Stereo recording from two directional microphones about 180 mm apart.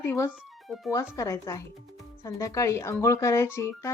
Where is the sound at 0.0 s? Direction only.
15° left (ahead or behind).